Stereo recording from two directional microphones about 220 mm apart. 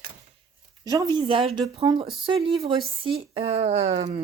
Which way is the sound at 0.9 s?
20° right (ahead or behind).